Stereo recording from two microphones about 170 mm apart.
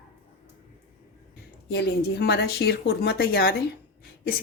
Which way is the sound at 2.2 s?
75° left (ahead or behind).